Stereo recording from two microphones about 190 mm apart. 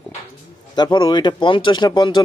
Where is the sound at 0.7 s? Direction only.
25° left (ahead or behind).